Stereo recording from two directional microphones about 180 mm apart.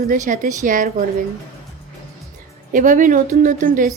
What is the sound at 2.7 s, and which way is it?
Speech, 45° right (ahead or behind).